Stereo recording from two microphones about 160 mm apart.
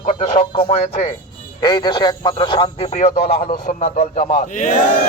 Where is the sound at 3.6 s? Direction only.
50° left (ahead or behind).